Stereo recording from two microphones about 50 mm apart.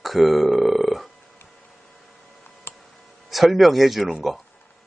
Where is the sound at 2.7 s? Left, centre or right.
Left.